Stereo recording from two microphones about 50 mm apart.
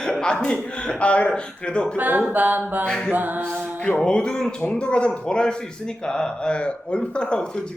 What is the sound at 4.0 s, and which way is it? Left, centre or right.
A man's voice, centre.